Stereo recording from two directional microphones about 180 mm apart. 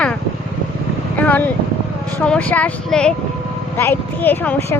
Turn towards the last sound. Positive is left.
turn(degrees=10)  # may be behind; listen again after turning